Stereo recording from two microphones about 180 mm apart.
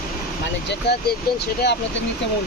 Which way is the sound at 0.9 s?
65° left (ahead or behind).